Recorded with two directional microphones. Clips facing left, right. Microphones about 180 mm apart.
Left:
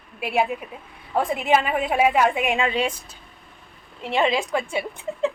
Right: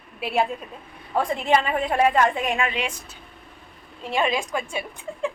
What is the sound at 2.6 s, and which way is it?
Speech, 30° left (ahead or behind).